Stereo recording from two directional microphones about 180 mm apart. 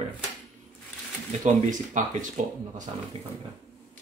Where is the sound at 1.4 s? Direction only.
45° right (ahead or behind).